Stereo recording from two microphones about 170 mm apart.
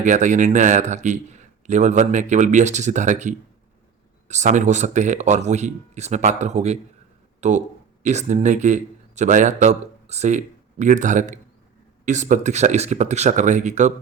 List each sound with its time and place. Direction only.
0.0 s a man's voice: 45° right (ahead or behind)